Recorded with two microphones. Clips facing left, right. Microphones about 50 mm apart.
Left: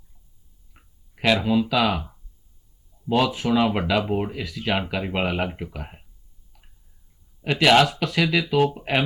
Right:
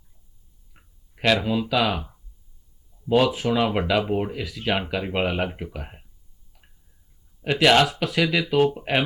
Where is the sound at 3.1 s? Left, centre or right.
Centre.